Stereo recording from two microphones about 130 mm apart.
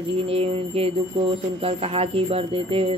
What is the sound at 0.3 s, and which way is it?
Speech, 50° right (ahead or behind).